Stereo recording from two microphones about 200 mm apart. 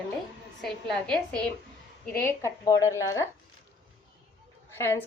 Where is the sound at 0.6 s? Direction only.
5° left (ahead or behind).